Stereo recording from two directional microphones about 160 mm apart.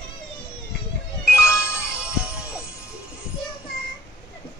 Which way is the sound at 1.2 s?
5° right (ahead or behind).